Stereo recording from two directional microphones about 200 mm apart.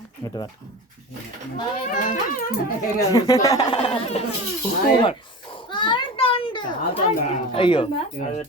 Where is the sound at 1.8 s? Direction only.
40° left (ahead or behind).